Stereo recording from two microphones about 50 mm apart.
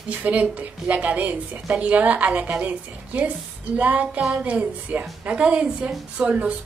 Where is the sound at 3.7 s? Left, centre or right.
Right.